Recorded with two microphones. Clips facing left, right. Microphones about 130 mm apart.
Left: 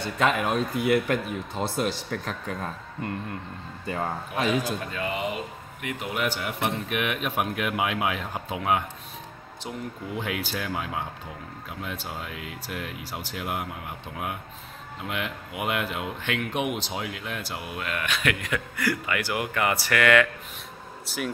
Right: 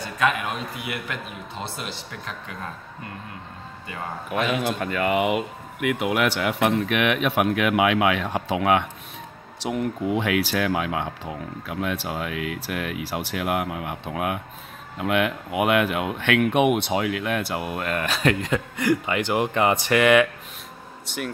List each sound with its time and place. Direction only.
0.0 s a man's voice: 30° left (ahead or behind)
4.4 s a man's voice: 40° left (ahead or behind)
4.7 s speech: 65° right (ahead or behind); by 8.8 s 90° right
9.6 s speech: 75° right (ahead or behind)
11.7 s speech: 75° right (ahead or behind); by 20.2 s 20° right (ahead or behind)
21.1 s speech: 5° left (ahead or behind)